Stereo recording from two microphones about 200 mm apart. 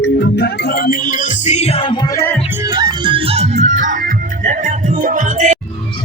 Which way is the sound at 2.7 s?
20° right (ahead or behind).